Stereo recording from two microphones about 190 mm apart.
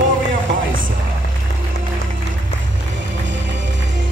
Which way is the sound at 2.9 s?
70° right (ahead or behind).